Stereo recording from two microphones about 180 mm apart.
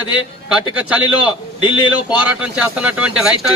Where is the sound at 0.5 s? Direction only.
5° right (ahead or behind).